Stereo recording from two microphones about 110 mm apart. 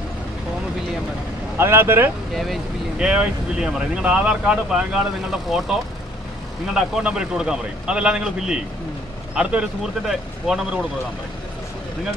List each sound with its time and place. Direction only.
1.6 s speech: 20° right (ahead or behind)
2.3 s a man's voice: centre (ahead or behind)